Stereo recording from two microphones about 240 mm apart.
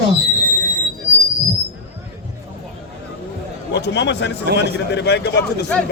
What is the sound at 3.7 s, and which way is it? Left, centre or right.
A man's voice, left.